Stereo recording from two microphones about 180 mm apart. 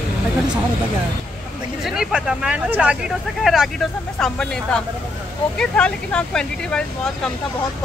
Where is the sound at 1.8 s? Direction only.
5° right (ahead or behind).